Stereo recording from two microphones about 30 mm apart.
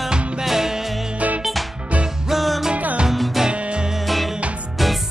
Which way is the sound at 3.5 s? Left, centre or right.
Right.